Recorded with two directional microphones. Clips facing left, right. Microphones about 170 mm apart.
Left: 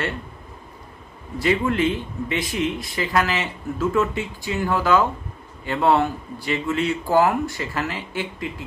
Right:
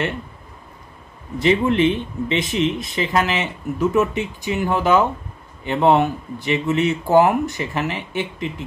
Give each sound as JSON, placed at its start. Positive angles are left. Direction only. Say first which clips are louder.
{"t": 1.4, "sound": "speech", "louder": "right 4 dB", "side_deg": -20}